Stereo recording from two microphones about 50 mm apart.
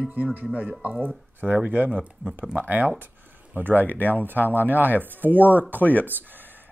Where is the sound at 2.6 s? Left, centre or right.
Right.